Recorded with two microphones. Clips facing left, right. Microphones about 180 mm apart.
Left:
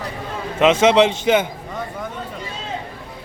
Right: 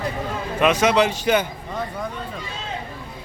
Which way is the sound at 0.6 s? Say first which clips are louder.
Left 4 dB; 25° left (ahead or behind).